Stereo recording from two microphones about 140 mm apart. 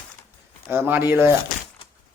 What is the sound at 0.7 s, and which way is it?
Speech, 15° right (ahead or behind).